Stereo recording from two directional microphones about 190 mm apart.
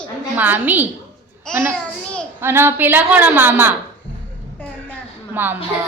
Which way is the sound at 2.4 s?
10° right (ahead or behind).